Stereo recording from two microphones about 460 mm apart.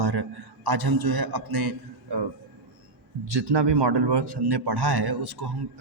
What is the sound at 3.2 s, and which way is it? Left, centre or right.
A man's voice, right.